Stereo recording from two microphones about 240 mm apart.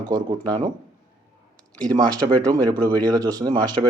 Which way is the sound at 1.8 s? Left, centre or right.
Centre.